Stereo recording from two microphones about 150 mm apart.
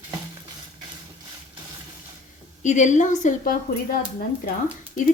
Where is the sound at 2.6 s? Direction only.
55° left (ahead or behind); by 4.0 s 70° left (ahead or behind).